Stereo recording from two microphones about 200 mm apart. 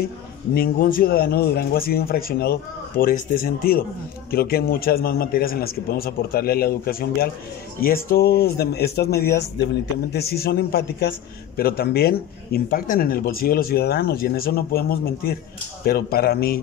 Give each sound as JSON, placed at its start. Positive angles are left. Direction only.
{"t": 0.6, "sound": "a man's voice", "side_deg": 45}